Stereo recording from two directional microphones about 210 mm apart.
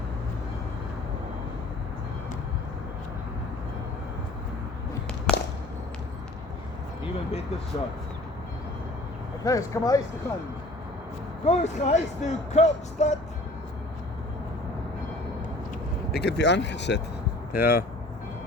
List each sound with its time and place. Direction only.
5.3 s a sound: 5° left (ahead or behind)
9.4 s speech: 15° left (ahead or behind)
11.4 s speech: 30° left (ahead or behind)
16.1 s speech: 55° left (ahead or behind)